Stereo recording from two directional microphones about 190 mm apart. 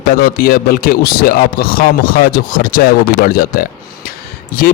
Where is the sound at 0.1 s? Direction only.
50° left (ahead or behind).